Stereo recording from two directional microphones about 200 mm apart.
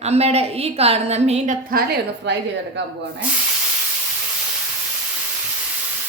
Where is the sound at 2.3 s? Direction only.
60° right (ahead or behind).